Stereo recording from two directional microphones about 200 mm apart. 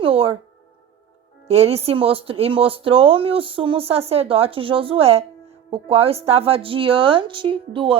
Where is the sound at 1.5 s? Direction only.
30° right (ahead or behind).